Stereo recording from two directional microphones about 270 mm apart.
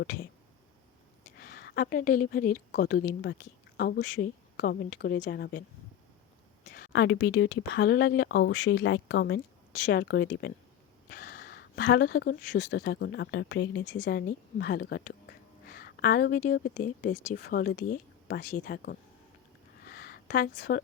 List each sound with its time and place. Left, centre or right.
1.4 s a woman's voice: left
6.7 s speech: left
19.9 s a sound: left